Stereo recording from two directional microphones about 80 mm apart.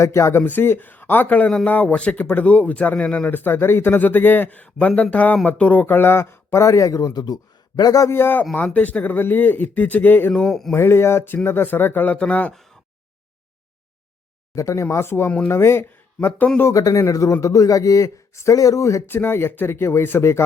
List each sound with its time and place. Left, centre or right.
0.0 s speech: left
8.1 s speech: left
10.3 s a sound: centre
10.7 s speech: left; by 12.5 s centre
14.5 s speech: left
16.7 s speech: left
19.0 s speech: left